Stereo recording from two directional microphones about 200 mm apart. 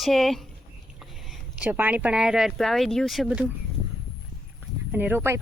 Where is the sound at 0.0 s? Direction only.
Centre (ahead or behind).